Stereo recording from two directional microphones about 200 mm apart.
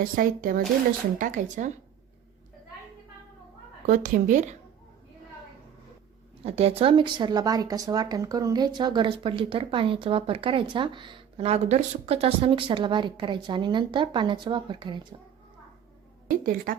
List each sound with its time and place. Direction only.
0.0 s a woman's voice: 45° right (ahead or behind)
3.8 s a woman's voice: 40° right (ahead or behind)
6.4 s speech: 30° right (ahead or behind)
16.7 s speech: 45° right (ahead or behind)